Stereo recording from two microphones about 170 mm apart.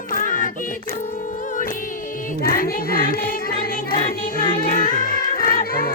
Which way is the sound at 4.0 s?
30° left (ahead or behind).